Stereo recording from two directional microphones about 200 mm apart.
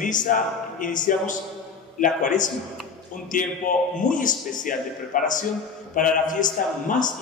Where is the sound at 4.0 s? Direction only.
40° left (ahead or behind).